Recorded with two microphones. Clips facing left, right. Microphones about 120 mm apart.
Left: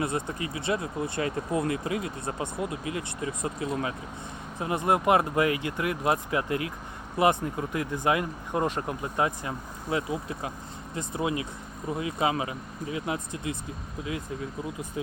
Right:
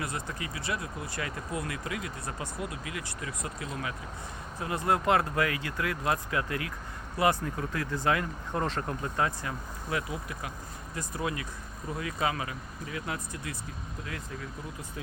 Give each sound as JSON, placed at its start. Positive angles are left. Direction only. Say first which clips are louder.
{"t": 0.0, "sound": "speech", "louder": "left 6 dB", "side_deg": 25}
{"t": 15.0, "sound": "speech", "louder": "left 8 dB", "side_deg": 20}